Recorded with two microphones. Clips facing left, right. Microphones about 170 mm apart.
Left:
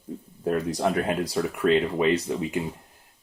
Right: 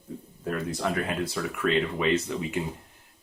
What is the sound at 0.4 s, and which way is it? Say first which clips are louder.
Speech: left 5 dB; 40° left (ahead or behind).